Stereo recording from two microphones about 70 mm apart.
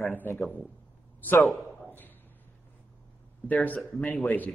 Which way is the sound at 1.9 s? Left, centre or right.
Left.